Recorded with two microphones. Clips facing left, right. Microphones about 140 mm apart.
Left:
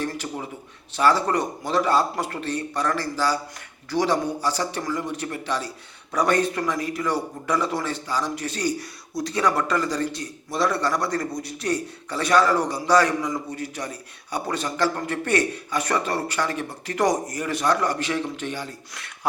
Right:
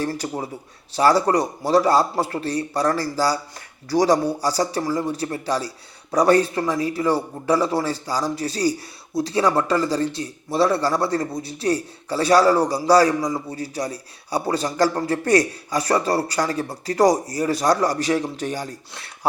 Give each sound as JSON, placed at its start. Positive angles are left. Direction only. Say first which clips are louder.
{"t": 0.0, "sound": "a man's voice", "louder": "right 4 dB", "side_deg": -35}